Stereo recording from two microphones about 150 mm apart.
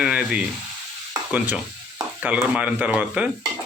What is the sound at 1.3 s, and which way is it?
Speech, 10° right (ahead or behind).